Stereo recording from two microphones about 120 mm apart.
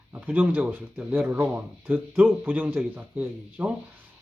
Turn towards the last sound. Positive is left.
turn(degrees=-15)  # may be behind; listen again after turning